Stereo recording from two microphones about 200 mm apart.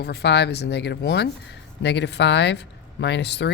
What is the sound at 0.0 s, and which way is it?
Speech, 55° left (ahead or behind).